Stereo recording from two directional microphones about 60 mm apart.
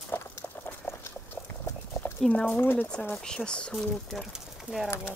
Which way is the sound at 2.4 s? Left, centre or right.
Left.